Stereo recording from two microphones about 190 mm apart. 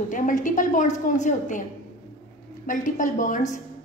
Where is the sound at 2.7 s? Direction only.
45° left (ahead or behind).